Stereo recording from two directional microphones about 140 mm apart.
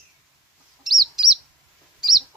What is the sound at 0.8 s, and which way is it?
Chicken, centre (ahead or behind).